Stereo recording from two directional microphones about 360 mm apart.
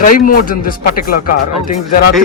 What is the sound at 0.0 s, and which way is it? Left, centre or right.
Speech, left.